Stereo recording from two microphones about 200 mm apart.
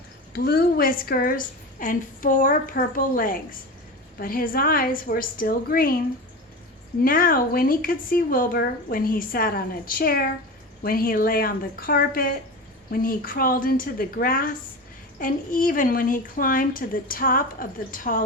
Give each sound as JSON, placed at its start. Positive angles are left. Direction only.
{"t": 0.3, "sound": "a woman's voice", "side_deg": 50}
{"t": 7.0, "sound": "a woman's voice", "side_deg": 45}